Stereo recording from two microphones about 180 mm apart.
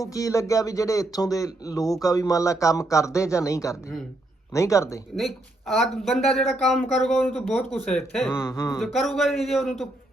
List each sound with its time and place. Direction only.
0.0 s speech: 20° left (ahead or behind)
5.1 s speech: centre (ahead or behind)
8.4 s speech: 15° left (ahead or behind)
8.8 s speech: centre (ahead or behind)